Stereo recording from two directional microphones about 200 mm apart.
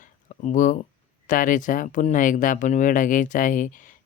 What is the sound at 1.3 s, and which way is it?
Speech, 40° left (ahead or behind).